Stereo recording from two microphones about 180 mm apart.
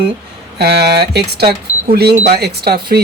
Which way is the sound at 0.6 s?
65° right (ahead or behind).